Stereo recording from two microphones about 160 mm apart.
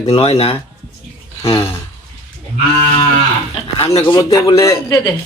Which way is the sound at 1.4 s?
20° left (ahead or behind).